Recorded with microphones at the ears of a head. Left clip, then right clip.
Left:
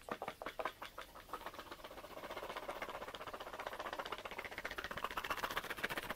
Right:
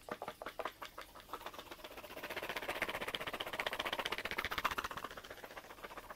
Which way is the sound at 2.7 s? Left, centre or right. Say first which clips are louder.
Right 6 dB; right.